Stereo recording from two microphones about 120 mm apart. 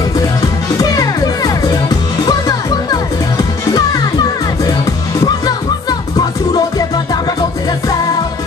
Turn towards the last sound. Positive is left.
turn(degrees=35)  # may be behind; listen again after turning